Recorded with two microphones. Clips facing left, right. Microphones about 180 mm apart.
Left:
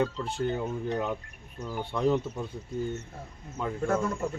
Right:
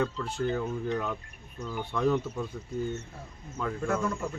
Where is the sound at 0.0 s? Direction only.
25° left (ahead or behind).